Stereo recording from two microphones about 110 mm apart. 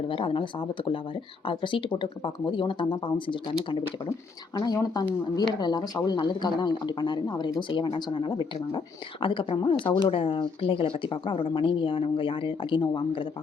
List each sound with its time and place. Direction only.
0.1 s speech: 50° left (ahead or behind)
4.5 s speech: 35° left (ahead or behind)